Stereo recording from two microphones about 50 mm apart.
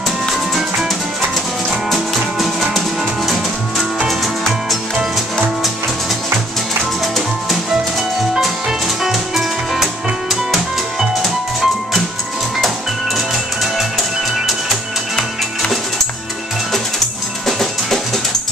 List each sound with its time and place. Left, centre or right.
0.3 s music: centre
2.1 s music: centre
8.4 s music: centre
11.0 s music: centre
15.1 s music: centre
17.5 s music: centre